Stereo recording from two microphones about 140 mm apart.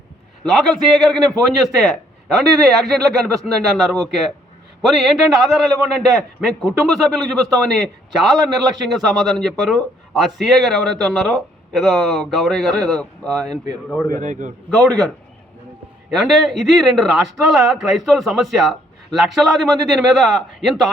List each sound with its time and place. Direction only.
0.4 s a man's voice: centre (ahead or behind)
8.9 s a man's voice: centre (ahead or behind)
14.1 s a man's voice: 65° right (ahead or behind)
14.7 s a man's voice: 5° left (ahead or behind)